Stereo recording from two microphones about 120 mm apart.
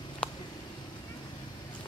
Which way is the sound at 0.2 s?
10° left (ahead or behind).